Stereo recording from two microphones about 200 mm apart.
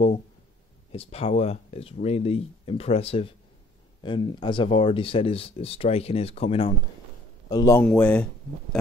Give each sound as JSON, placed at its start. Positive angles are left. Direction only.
{"t": 0.9, "sound": "speech", "side_deg": 30}
{"t": 7.4, "sound": "a man's voice", "side_deg": 20}
{"t": 7.9, "sound": "speech", "side_deg": 5}